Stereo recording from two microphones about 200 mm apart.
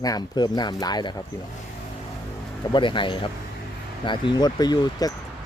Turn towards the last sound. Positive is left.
turn(degrees=20)  # may be behind; listen again after turning